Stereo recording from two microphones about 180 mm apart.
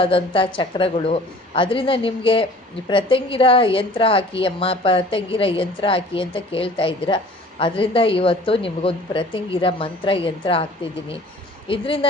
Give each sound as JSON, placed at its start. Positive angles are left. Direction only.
{"t": 0.0, "sound": "a woman's voice", "side_deg": 30}